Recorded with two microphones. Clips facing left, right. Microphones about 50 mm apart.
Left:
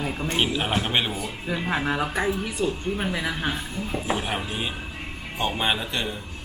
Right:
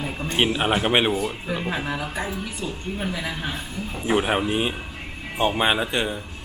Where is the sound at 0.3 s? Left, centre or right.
Right.